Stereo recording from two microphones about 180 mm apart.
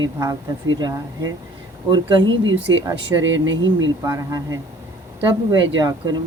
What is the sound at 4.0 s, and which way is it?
Speech, 15° right (ahead or behind).